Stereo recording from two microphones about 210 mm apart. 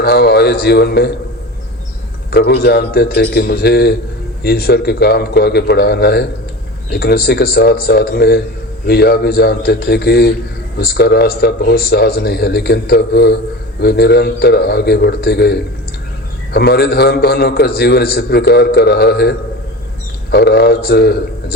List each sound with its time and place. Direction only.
0.0 s a man's voice: 50° left (ahead or behind)
2.3 s a man's voice: 50° left (ahead or behind)